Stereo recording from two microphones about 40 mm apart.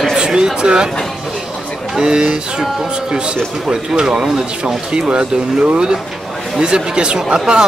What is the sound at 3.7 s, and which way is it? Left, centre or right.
Speech, centre.